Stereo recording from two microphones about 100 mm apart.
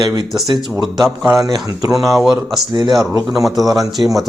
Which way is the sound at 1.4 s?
40° right (ahead or behind).